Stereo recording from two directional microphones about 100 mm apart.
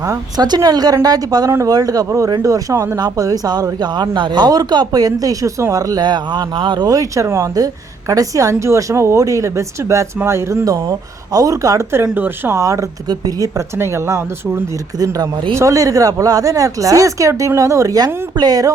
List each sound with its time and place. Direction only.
0.1 s speech: 45° right (ahead or behind)
1.5 s speech: 25° right (ahead or behind)
1.7 s speech: 40° right (ahead or behind)
12.1 s speech: 20° right (ahead or behind)
12.5 s speech: 30° right (ahead or behind)
14.9 s speech: 40° right (ahead or behind)